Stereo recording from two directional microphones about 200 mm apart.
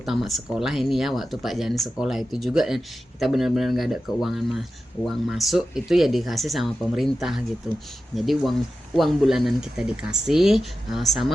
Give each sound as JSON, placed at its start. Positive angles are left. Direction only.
{"t": 0.0, "sound": "speech", "side_deg": 0}